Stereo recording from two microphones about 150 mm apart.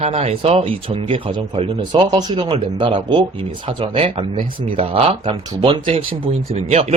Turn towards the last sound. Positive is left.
turn(degrees=-45)  # may be behind; listen again after turning